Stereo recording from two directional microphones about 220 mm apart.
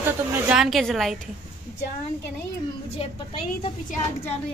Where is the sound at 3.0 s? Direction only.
25° left (ahead or behind).